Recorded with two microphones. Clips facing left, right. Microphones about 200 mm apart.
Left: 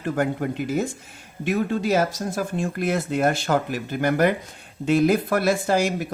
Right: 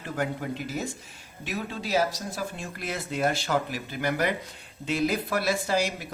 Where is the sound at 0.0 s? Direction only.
55° left (ahead or behind).